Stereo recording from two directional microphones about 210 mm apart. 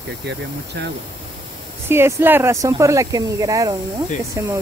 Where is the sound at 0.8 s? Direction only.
55° right (ahead or behind).